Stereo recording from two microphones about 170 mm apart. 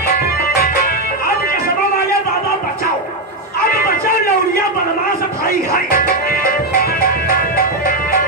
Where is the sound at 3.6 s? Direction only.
60° left (ahead or behind).